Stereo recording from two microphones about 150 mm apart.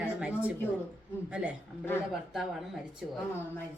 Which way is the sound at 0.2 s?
10° right (ahead or behind).